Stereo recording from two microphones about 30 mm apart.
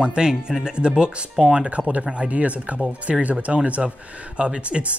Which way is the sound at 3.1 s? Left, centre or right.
Right.